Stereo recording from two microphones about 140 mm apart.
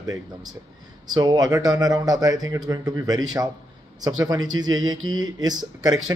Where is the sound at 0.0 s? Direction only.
25° right (ahead or behind).